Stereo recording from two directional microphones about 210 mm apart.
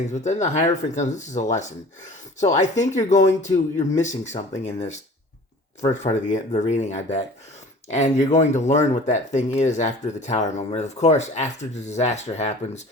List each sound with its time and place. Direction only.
0.1 s speech: 35° left (ahead or behind)
6.0 s speech: 35° left (ahead or behind)